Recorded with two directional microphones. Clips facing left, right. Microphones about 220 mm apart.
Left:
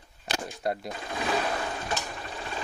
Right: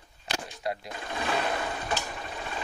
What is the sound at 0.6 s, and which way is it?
Speech, 45° left (ahead or behind).